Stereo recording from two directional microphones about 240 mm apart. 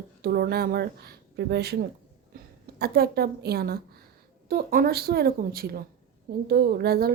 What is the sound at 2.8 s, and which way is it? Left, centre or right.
A woman's voice, right.